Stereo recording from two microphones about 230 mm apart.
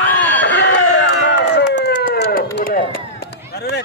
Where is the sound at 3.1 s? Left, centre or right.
Left.